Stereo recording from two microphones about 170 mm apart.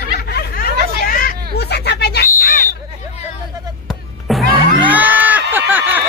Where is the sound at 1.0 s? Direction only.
55° left (ahead or behind); by 2.2 s 75° left (ahead or behind).